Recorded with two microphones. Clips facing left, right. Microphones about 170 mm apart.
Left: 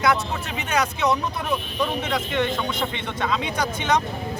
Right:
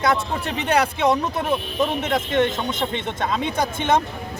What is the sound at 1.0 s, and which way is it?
Speech, 30° right (ahead or behind).